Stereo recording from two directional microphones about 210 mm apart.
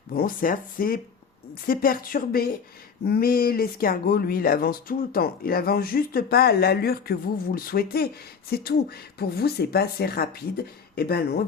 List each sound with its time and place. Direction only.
0.1 s speech: 45° left (ahead or behind)